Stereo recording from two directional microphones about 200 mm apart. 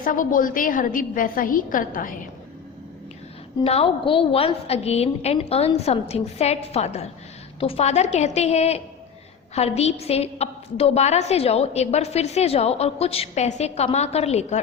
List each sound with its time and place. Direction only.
0.0 s a woman's voice: 40° left (ahead or behind)
3.6 s a woman's voice: 30° left (ahead or behind)